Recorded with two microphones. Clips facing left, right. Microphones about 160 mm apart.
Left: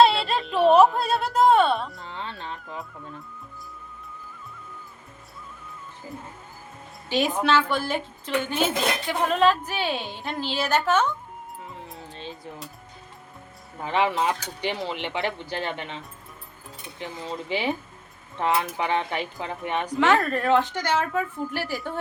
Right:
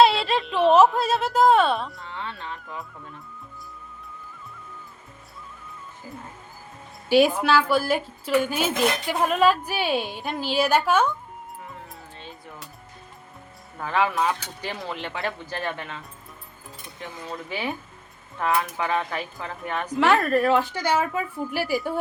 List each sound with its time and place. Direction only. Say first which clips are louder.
0.0 s a sound: right 1 dB; centre (ahead or behind)
2.0 s music: right 1 dB; 35° left (ahead or behind)
7.1 s a woman's voice: right 4 dB; 10° right (ahead or behind)
11.9 s music: left 4 dB; 25° left (ahead or behind)
13.7 s speech: even; 20° left (ahead or behind)
19.9 s a woman's voice: right 2 dB; 5° right (ahead or behind)